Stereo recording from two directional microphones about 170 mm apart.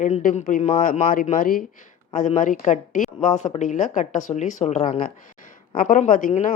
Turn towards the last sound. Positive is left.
turn(degrees=50)  # may be behind; listen again after turning